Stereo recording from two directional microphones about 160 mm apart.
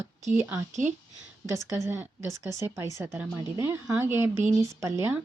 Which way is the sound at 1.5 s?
20° right (ahead or behind).